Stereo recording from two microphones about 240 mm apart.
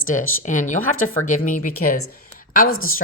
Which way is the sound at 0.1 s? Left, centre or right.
Left.